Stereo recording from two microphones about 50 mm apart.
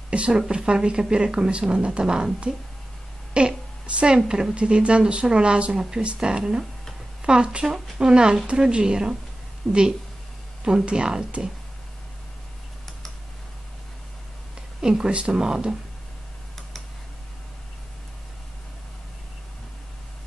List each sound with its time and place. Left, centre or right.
0.1 s a woman's voice: right
14.8 s speech: centre